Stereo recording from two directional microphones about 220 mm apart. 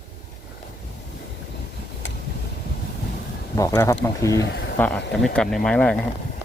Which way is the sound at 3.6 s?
15° left (ahead or behind).